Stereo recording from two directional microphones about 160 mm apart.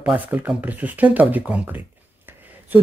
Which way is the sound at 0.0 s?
10° right (ahead or behind).